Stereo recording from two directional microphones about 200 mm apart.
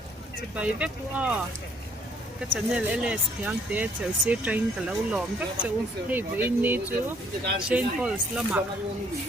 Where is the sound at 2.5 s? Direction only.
5° right (ahead or behind).